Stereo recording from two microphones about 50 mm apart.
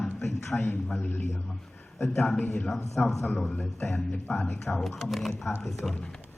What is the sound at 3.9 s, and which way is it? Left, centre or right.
Speech, left.